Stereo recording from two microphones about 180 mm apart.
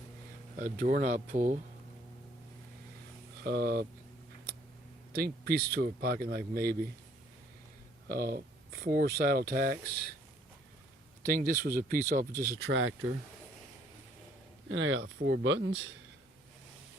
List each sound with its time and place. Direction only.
0.5 s speech: 45° right (ahead or behind)
3.4 s speech: 60° right (ahead or behind)
5.1 s speech: 60° right (ahead or behind)
8.0 s speech: 55° right (ahead or behind)
11.3 s speech: 50° right (ahead or behind)
12.4 s speech: 60° right (ahead or behind); by 12.9 s 80° right
14.7 s speech: 90° right